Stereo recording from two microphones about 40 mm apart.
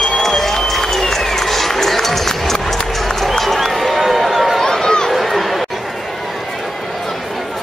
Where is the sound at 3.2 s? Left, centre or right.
Centre.